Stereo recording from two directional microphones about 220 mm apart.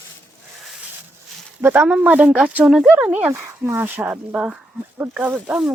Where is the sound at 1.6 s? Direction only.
10° right (ahead or behind).